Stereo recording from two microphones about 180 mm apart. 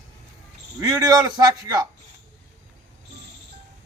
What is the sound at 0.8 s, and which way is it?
A man's voice, 20° right (ahead or behind).